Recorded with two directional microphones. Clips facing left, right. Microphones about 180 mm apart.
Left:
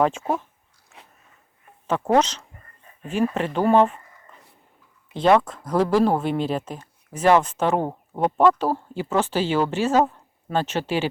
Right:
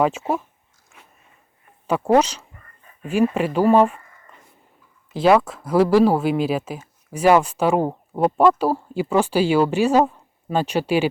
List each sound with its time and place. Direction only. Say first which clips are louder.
0.0 s speech: right 1 dB; 5° right (ahead or behind)
1.9 s speech: right 3 dB; 10° right (ahead or behind)
2.6 s a sound: right 3 dB; 35° left (ahead or behind)
3.3 s speech: right 1 dB; 10° right (ahead or behind)
5.1 s speech: right 2 dB; 5° right (ahead or behind)